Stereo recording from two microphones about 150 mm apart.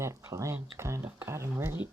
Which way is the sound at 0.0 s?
20° right (ahead or behind).